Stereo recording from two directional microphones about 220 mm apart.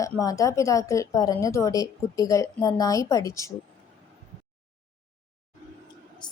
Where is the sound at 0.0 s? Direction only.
15° left (ahead or behind).